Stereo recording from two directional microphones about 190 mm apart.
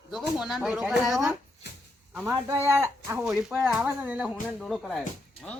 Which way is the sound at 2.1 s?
15° right (ahead or behind).